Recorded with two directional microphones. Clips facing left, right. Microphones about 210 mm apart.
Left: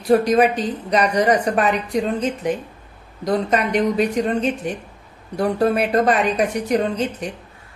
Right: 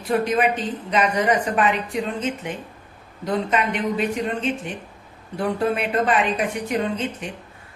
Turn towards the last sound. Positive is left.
turn(degrees=40)  # may be behind; listen again after turning